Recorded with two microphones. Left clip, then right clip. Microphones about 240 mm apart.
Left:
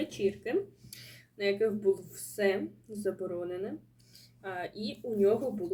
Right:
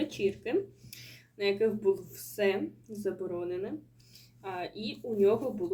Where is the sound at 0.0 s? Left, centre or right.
Centre.